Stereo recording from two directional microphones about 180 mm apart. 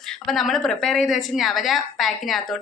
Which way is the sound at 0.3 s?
Centre (ahead or behind).